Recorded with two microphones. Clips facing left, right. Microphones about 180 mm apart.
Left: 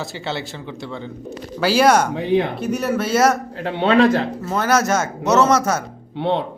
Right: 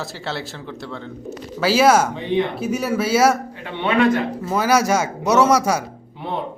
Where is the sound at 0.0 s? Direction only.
Centre (ahead or behind).